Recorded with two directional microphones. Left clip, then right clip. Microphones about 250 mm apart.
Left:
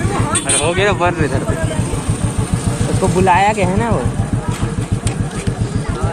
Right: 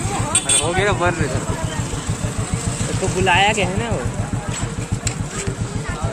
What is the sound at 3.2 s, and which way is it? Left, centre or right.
Speech, centre.